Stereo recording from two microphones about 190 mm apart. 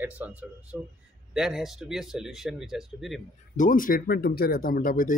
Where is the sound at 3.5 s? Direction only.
45° left (ahead or behind).